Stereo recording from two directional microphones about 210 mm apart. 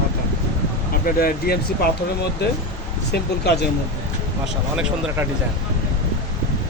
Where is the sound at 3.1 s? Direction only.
50° left (ahead or behind).